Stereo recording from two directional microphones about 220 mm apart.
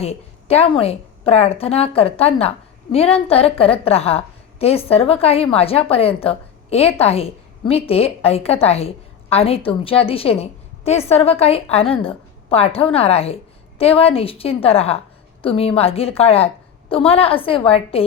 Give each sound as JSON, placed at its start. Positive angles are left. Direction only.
{"t": 0.0, "sound": "a woman's voice", "side_deg": 30}